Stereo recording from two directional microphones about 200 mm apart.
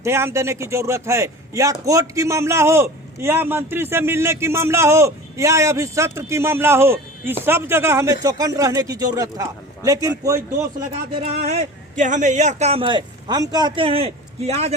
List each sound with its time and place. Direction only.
0.0 s a man's voice: 10° right (ahead or behind)
11.1 s a man's voice: 30° right (ahead or behind)